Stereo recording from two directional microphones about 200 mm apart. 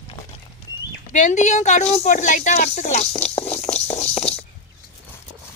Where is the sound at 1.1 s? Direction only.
35° left (ahead or behind).